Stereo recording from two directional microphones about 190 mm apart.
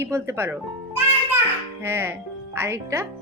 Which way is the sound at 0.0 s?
15° right (ahead or behind).